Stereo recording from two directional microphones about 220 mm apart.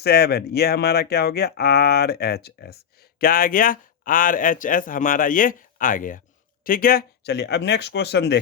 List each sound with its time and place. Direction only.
0.0 s speech: 45° left (ahead or behind)